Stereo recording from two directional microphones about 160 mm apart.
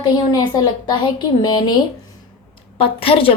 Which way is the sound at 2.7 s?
35° left (ahead or behind).